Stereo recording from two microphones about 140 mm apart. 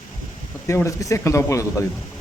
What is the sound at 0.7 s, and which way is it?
Speech, 20° left (ahead or behind).